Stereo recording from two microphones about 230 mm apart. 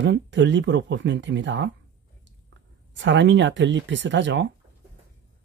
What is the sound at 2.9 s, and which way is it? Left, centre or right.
Speech, right.